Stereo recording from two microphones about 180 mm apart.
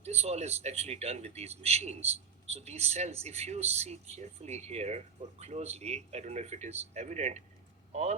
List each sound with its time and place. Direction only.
0.0 s a man's voice: 35° right (ahead or behind)